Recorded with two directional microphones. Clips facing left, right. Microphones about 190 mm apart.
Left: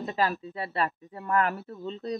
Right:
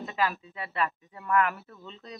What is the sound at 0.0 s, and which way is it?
A man's voice, 35° left (ahead or behind).